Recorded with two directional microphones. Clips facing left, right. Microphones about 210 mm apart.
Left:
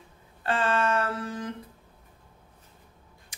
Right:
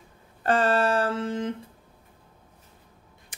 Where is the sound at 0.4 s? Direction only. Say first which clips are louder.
Right 4 dB; 40° right (ahead or behind); by 1.5 s 25° right (ahead or behind).